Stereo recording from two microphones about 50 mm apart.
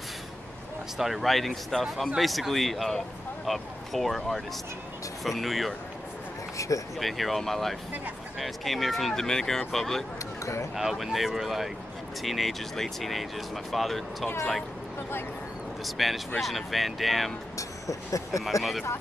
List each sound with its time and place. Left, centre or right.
0.9 s speech: centre
6.5 s speech: left
7.0 s speech: centre
10.4 s speech: left
10.8 s speech: centre
15.8 s speech: centre
17.6 s speech: left
18.6 s speech: centre